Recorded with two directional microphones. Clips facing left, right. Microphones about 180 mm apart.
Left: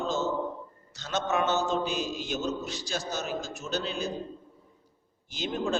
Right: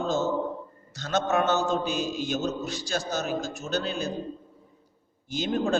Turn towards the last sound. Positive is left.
turn(degrees=-45)  # may be behind; listen again after turning